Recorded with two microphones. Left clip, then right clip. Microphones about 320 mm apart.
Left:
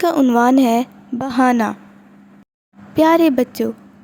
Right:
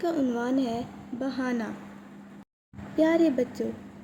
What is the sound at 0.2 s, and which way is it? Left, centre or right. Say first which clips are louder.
Speech: left 14 dB; left.